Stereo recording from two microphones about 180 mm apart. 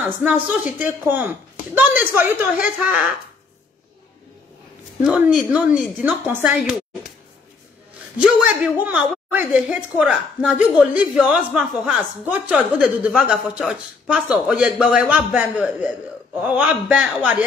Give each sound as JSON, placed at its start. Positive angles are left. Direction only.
{"t": 0.0, "sound": "a woman's voice", "side_deg": -10}
{"t": 5.0, "sound": "a woman's voice", "side_deg": -5}
{"t": 6.6, "sound": "a sound", "side_deg": 0}
{"t": 8.2, "sound": "a woman's voice", "side_deg": -10}